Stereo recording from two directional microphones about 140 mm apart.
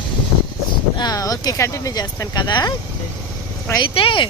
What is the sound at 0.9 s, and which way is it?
Speech, 30° left (ahead or behind).